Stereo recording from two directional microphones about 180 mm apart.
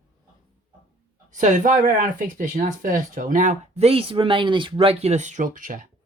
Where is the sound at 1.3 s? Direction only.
45° right (ahead or behind).